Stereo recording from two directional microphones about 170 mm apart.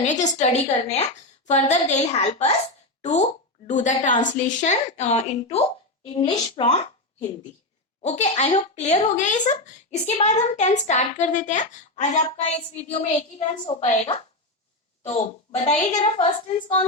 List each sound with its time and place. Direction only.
0.0 s a woman's voice: 45° left (ahead or behind)